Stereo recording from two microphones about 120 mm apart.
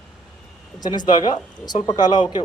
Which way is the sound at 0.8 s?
35° left (ahead or behind).